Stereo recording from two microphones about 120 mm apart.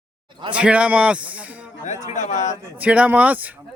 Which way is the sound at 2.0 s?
80° left.